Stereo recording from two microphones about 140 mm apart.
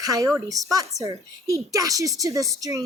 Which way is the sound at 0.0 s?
25° right (ahead or behind).